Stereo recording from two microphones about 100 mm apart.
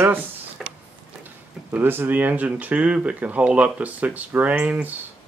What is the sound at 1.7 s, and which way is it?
Speech, 20° right (ahead or behind).